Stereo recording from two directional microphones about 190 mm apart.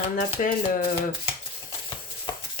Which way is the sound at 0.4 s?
40° left (ahead or behind).